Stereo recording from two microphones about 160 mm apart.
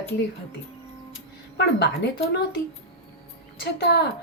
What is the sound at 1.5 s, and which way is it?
Speech, 90° left.